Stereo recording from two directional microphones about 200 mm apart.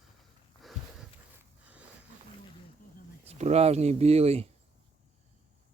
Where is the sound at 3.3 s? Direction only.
35° right (ahead or behind).